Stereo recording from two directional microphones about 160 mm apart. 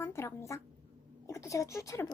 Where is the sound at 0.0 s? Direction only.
15° left (ahead or behind).